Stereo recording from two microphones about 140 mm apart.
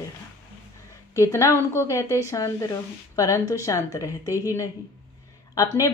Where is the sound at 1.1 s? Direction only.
20° left (ahead or behind).